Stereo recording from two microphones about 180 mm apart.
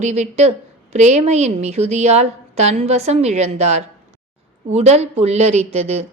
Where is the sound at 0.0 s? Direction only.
40° right (ahead or behind).